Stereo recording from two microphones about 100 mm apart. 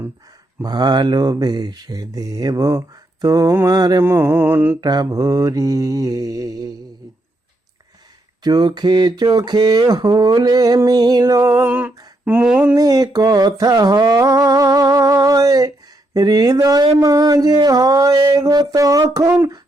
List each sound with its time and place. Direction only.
0.6 s speech: 45° right (ahead or behind)
4.0 s mantra: 25° right (ahead or behind)
4.8 s speech: 40° right (ahead or behind)
8.4 s speech: 45° right (ahead or behind)
11.6 s a sound: 20° right (ahead or behind)
12.6 s speech: 35° right (ahead or behind)